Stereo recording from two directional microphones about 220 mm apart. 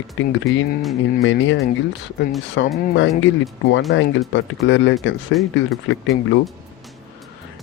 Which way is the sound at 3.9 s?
55° left (ahead or behind).